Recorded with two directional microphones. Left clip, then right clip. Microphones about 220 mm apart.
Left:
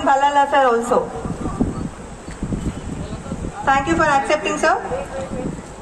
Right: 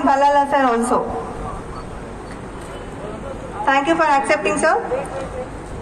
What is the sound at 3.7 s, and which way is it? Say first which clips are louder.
A woman's voice: right 1 dB; 25° right (ahead or behind).